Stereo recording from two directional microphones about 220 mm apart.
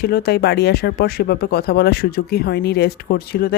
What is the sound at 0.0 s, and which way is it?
Speech, 45° left (ahead or behind).